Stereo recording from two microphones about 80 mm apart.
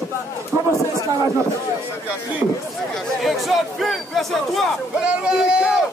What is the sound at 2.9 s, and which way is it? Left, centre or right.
Speech, centre.